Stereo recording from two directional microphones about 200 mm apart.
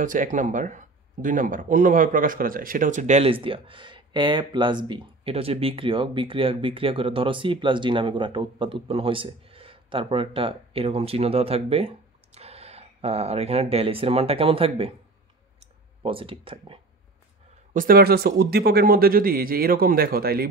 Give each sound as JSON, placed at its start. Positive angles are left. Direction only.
{"t": 0.0, "sound": "speech", "side_deg": -40}
{"t": 16.0, "sound": "speech", "side_deg": -25}
{"t": 17.7, "sound": "speech", "side_deg": -45}